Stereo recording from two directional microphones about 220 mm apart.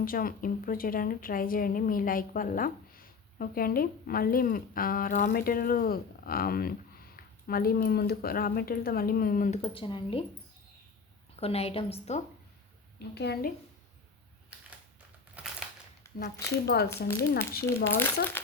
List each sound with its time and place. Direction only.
0.0 s speech: 40° left (ahead or behind)
9.6 s a woman's voice: 25° left (ahead or behind)
11.3 s a woman's voice: 25° left (ahead or behind)
13.0 s speech: 50° left (ahead or behind)
15.4 s a sound: 5° right (ahead or behind)
16.1 s zipper: 10° left (ahead or behind)
16.6 s speech: 45° left (ahead or behind)
16.9 s speech: 10° left (ahead or behind)
17.7 s speech: 40° left (ahead or behind)